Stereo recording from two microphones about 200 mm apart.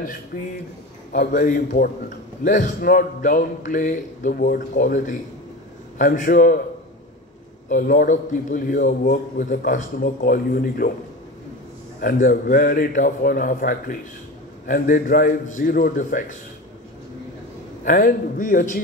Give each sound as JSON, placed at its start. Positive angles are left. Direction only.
{"t": 1.3, "sound": "a man's voice", "side_deg": 40}
{"t": 7.7, "sound": "a man's voice", "side_deg": 45}
{"t": 12.0, "sound": "a man's voice", "side_deg": 45}
{"t": 17.8, "sound": "a man's voice", "side_deg": 40}